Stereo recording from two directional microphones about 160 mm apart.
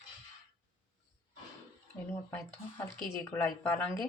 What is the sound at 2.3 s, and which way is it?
Speech, 15° left (ahead or behind).